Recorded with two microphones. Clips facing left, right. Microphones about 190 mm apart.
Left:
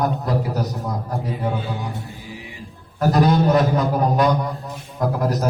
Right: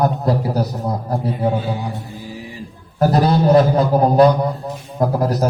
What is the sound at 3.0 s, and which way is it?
A man's voice, 35° right (ahead or behind).